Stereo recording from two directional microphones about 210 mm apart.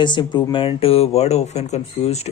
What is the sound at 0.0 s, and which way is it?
Speech, 20° left (ahead or behind).